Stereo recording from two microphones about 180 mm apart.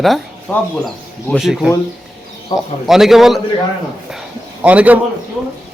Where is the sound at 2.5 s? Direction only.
25° left (ahead or behind).